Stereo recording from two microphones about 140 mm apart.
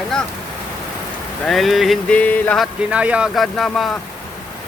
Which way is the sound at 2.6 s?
10° right (ahead or behind).